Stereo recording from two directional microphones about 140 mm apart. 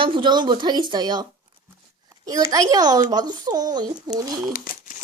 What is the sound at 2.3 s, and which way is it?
A child's voice, 25° right (ahead or behind).